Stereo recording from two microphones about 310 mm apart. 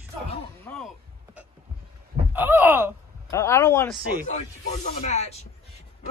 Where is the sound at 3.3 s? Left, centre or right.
Centre.